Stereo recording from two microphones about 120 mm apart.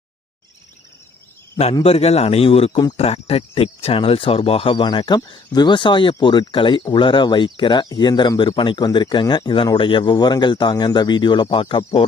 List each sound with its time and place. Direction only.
1.8 s speech: 55° left (ahead or behind)